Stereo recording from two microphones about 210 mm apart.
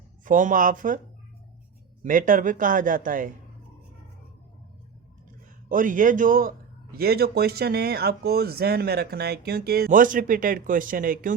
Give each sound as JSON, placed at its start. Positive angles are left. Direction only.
{"t": 0.3, "sound": "a man's voice", "side_deg": -40}
{"t": 2.0, "sound": "a man's voice", "side_deg": -40}
{"t": 5.6, "sound": "a man's voice", "side_deg": -40}